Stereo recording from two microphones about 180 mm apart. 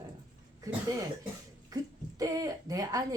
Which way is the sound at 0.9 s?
15° right (ahead or behind).